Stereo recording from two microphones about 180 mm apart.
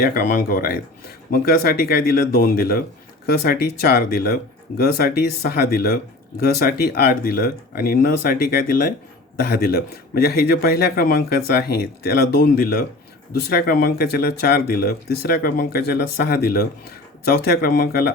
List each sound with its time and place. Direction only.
0.0 s speech: 50° left (ahead or behind)